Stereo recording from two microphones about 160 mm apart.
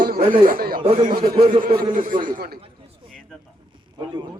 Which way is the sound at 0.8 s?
30° right (ahead or behind).